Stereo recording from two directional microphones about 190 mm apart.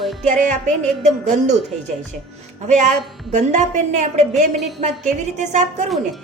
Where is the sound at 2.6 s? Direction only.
40° right (ahead or behind).